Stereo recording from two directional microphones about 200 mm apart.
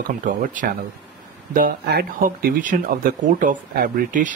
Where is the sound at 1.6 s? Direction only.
50° right (ahead or behind).